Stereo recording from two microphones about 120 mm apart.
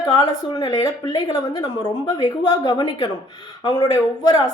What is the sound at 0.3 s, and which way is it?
Speech, 35° left (ahead or behind).